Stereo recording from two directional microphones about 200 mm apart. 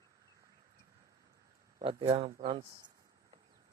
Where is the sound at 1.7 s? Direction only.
25° right (ahead or behind).